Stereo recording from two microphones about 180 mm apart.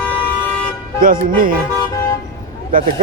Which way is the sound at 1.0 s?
50° right (ahead or behind).